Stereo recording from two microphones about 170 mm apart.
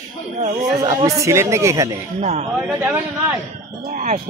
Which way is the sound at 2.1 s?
40° right (ahead or behind).